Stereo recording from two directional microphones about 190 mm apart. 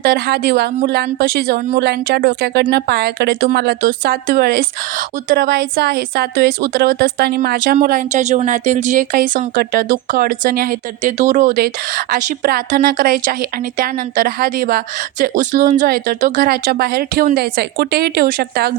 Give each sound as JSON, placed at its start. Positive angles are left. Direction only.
{"t": 0.0, "sound": "speech", "side_deg": -55}